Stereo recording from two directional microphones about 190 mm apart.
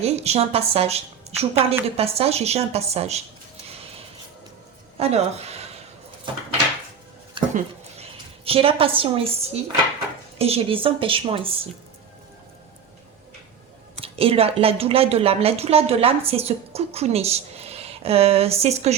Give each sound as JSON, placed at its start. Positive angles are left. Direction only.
{"t": 0.0, "sound": "a woman's voice", "side_deg": -35}
{"t": 4.9, "sound": "speech", "side_deg": -35}
{"t": 6.3, "sound": "a sound", "side_deg": -25}
{"t": 8.4, "sound": "a woman's voice", "side_deg": -30}
{"t": 14.0, "sound": "a woman's voice", "side_deg": -30}